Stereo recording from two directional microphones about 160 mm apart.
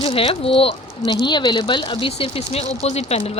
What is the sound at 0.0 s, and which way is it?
A woman's voice, 35° left (ahead or behind).